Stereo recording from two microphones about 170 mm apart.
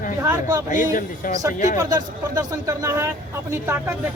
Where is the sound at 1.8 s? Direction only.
20° right (ahead or behind).